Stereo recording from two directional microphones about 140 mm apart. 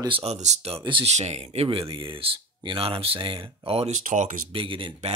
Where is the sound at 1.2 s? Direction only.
50° right (ahead or behind).